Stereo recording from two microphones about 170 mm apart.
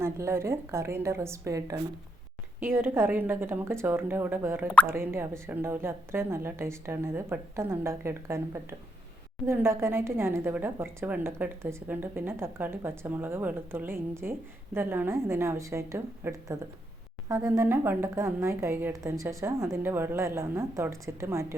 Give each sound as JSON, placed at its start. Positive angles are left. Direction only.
{"t": 0.0, "sound": "a woman's voice", "side_deg": -15}